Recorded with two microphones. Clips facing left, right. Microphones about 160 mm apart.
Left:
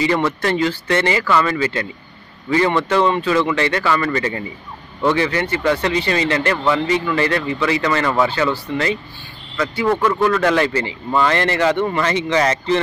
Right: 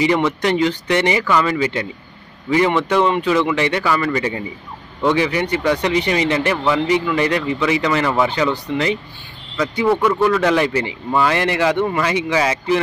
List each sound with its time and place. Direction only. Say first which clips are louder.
0.0 s speech: right 1 dB; 15° right (ahead or behind)
9.8 s speech: right 1 dB; 5° right (ahead or behind)